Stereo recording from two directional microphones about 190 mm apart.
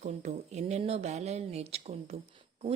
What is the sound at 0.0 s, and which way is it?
Speech, 35° right (ahead or behind).